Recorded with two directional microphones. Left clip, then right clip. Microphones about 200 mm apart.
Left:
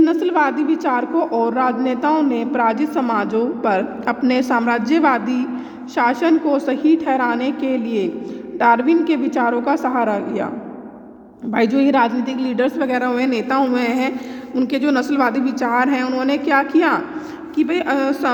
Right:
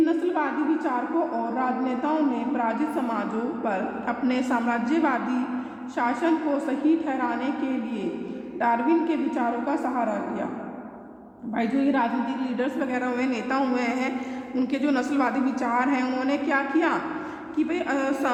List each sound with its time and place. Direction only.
0.0 s a sound: 30° left (ahead or behind)
1.5 s a woman's voice: 30° left (ahead or behind)
8.5 s a woman's voice: 30° left (ahead or behind)
11.5 s a woman's voice: 30° left (ahead or behind)